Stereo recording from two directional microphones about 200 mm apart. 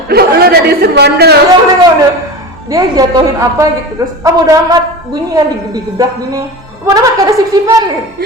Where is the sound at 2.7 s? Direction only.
15° right (ahead or behind).